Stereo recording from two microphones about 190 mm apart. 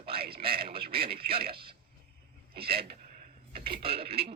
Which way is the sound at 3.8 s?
30° right (ahead or behind).